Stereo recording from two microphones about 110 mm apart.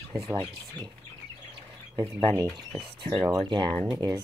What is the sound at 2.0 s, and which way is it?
Speech, 35° right (ahead or behind).